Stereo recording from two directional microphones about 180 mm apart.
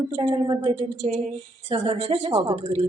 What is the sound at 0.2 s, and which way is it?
A woman's voice, 25° right (ahead or behind).